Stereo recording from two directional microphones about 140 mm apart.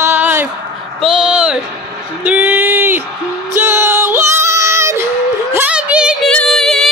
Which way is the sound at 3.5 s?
15° right (ahead or behind).